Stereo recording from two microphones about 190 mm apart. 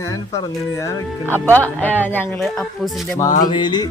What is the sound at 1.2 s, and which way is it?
Speech, 10° right (ahead or behind).